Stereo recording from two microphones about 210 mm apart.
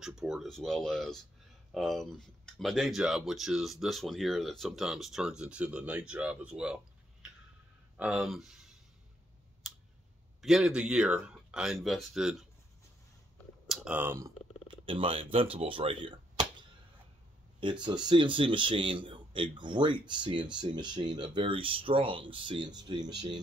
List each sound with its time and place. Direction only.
0.0 s speech: centre (ahead or behind)
9.6 s clicking: centre (ahead or behind)
10.4 s speech: centre (ahead or behind)
13.7 s speech: 5° right (ahead or behind)
14.7 s speech: 25° right (ahead or behind)